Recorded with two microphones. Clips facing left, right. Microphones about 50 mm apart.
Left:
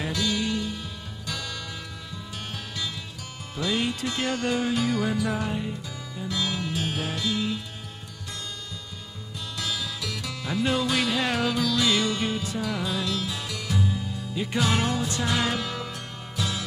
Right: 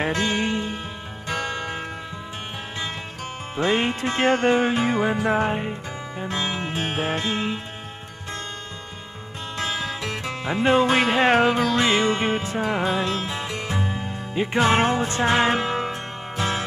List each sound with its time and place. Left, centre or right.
0.0 s music: right
3.5 s music: right
9.6 s music: right